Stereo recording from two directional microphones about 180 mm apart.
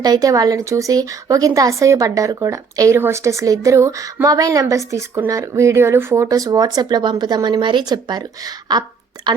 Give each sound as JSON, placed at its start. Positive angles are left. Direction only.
{"t": 0.0, "sound": "a woman's voice", "side_deg": -20}